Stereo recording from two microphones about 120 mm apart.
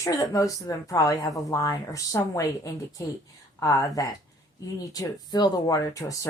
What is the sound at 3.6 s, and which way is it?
A woman's voice, 30° left (ahead or behind).